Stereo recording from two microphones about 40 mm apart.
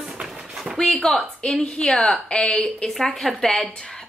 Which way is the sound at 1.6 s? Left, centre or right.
Left.